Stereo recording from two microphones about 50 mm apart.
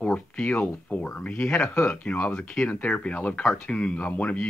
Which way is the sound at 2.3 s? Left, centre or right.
Centre.